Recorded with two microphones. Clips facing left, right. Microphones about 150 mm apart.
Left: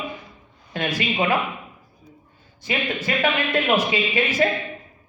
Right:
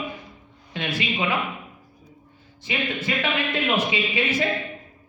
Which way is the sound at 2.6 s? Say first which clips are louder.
Left 2 dB; 45° left (ahead or behind).